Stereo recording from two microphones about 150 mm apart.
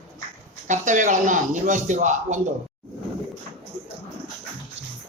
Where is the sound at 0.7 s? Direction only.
55° right (ahead or behind).